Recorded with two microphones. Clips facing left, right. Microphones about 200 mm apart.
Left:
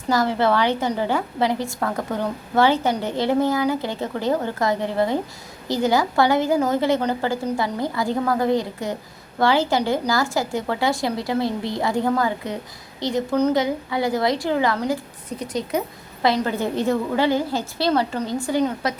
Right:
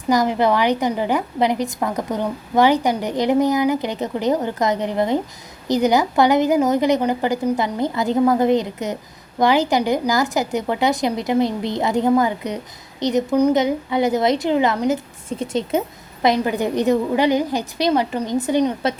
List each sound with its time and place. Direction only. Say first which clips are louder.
0.1 s a woman's voice: right 2 dB; 15° right (ahead or behind)
16.2 s a woman's voice: right 3 dB; 15° right (ahead or behind)